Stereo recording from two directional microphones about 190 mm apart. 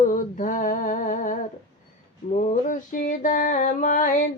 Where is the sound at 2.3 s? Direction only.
40° left (ahead or behind).